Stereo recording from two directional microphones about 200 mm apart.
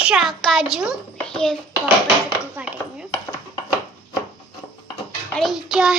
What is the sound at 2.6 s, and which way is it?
Speech, 10° right (ahead or behind).